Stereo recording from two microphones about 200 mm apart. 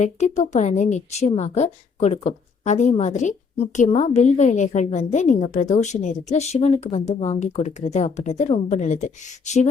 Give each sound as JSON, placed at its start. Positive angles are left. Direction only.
{"t": 0.0, "sound": "a woman's voice", "side_deg": 35}